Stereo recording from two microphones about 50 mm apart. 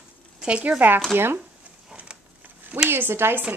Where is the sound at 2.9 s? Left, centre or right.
Right.